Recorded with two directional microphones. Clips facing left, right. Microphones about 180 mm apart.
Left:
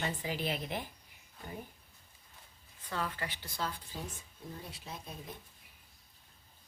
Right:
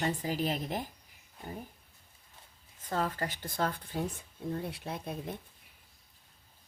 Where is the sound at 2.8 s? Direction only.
40° right (ahead or behind); by 5.1 s 60° right (ahead or behind).